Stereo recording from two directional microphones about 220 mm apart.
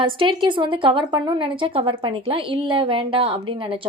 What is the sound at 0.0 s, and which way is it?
A woman's voice, 25° right (ahead or behind).